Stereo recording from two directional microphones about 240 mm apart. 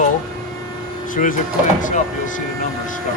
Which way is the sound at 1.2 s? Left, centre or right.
Left.